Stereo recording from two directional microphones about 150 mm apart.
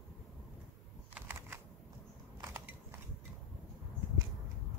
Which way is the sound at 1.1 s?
15° right (ahead or behind).